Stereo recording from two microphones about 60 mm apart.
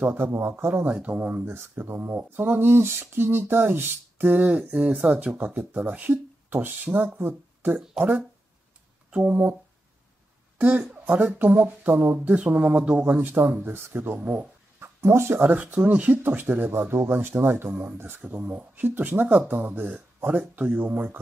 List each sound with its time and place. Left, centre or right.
0.2 s speech: right
0.8 s speech: right
4.4 s speech: right
9.1 s speech: right
11.1 s speech: right
14.8 s speech: right
15.5 s speech: right
18.2 s speech: right